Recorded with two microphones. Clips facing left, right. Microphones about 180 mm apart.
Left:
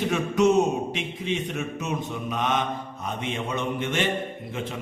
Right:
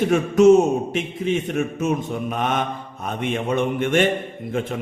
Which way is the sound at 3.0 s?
55° right (ahead or behind).